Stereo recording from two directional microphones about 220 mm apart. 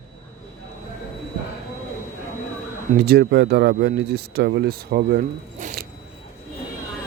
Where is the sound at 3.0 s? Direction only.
45° right (ahead or behind).